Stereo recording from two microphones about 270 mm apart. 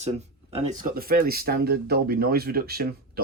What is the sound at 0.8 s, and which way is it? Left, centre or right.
Speech, right.